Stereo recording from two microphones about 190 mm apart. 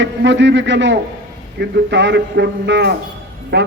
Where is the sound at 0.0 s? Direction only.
70° right (ahead or behind).